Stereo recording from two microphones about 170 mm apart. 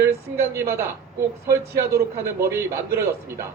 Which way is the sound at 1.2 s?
15° right (ahead or behind).